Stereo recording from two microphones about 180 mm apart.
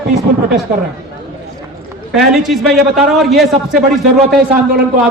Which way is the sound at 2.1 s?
Centre (ahead or behind).